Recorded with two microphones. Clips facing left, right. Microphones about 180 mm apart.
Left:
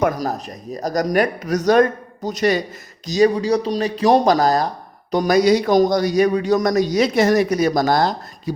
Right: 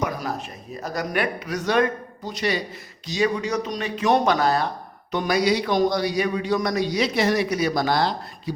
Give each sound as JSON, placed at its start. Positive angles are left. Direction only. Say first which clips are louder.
{"t": 0.2, "sound": "a man's voice", "louder": "left 5 dB", "side_deg": 40}